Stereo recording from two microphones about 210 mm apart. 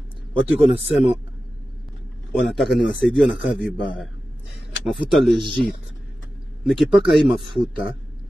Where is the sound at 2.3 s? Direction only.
Centre (ahead or behind).